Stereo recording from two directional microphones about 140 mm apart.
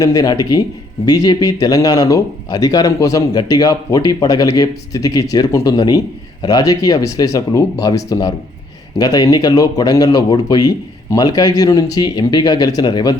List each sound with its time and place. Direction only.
0.0 s speech: 25° left (ahead or behind)